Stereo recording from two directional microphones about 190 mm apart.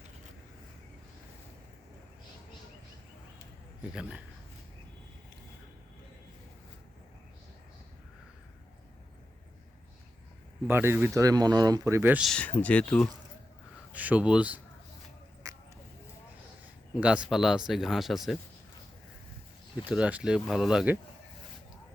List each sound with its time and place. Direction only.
10.7 s speech: 10° right (ahead or behind)
12.3 s speech: 10° left (ahead or behind)
13.9 s speech: 10° right (ahead or behind)
15.4 s a sound: 20° right (ahead or behind)
16.9 s speech: 5° right (ahead or behind)
19.8 s speech: 5° right (ahead or behind)